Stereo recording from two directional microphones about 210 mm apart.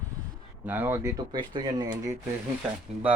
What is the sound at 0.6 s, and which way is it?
Speech, 10° right (ahead or behind).